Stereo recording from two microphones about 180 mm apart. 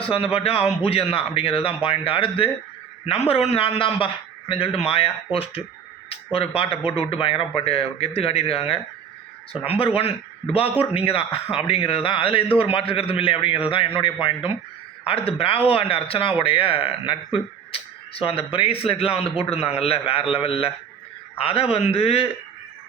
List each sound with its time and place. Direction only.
0.0 s speech: 30° left (ahead or behind)